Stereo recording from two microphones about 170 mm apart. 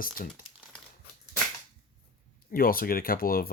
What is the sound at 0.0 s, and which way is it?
Speech, 55° left (ahead or behind).